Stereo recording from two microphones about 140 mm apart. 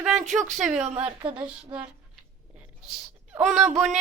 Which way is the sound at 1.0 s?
40° right (ahead or behind).